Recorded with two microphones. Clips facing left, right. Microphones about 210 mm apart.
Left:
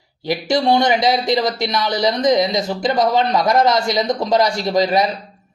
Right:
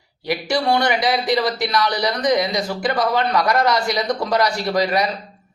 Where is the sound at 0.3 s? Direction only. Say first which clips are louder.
Left 3 dB; 25° left (ahead or behind).